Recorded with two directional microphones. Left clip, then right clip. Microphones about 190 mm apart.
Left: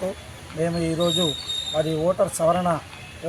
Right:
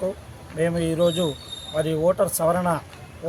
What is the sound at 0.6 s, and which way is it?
Speech, 5° right (ahead or behind).